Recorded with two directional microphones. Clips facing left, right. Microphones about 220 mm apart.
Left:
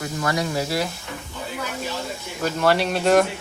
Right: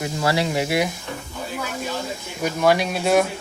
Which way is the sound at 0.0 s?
30° right (ahead or behind).